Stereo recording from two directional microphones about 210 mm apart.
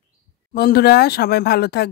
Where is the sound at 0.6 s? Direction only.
45° left (ahead or behind).